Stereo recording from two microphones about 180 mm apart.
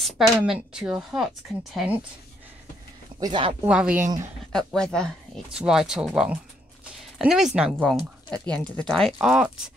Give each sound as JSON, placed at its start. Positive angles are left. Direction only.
{"t": 0.0, "sound": "speech", "side_deg": -5}
{"t": 3.2, "sound": "speech", "side_deg": -25}
{"t": 3.6, "sound": "speech", "side_deg": -5}
{"t": 4.5, "sound": "speech", "side_deg": 5}